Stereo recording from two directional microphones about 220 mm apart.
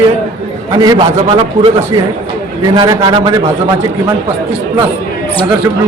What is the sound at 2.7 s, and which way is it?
Speech, 20° right (ahead or behind).